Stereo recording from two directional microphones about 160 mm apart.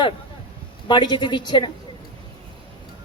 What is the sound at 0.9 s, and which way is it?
Speech, 30° left (ahead or behind).